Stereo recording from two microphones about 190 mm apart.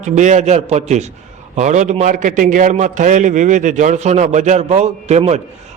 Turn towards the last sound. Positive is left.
turn(degrees=-35)  # may be behind; listen again after turning